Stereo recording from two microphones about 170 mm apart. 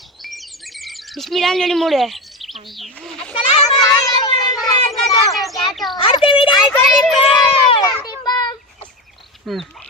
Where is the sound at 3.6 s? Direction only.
20° left (ahead or behind).